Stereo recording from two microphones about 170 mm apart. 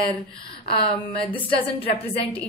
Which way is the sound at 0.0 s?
30° left (ahead or behind).